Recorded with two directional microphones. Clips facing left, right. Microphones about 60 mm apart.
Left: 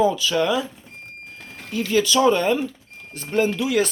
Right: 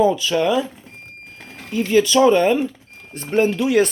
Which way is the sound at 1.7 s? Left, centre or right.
Right.